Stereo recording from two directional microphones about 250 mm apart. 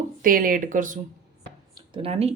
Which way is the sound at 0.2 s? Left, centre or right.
Right.